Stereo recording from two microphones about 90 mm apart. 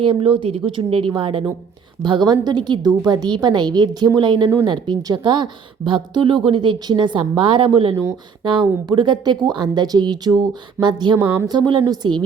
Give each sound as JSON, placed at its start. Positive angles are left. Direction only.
{"t": 0.0, "sound": "a woman's voice", "side_deg": -80}
{"t": 2.0, "sound": "a woman's voice", "side_deg": -55}